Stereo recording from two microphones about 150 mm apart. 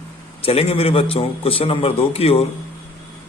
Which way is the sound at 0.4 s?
40° left (ahead or behind).